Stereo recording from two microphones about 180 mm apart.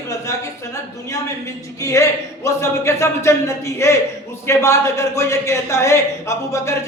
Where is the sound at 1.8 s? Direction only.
15° left (ahead or behind).